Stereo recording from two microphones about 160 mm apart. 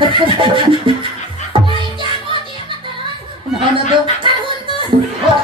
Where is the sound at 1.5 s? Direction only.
30° right (ahead or behind).